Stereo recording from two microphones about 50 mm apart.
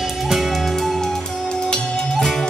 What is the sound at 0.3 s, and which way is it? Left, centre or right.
Music, centre.